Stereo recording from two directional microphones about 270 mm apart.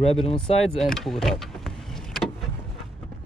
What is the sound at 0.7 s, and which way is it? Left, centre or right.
Vehicle, centre.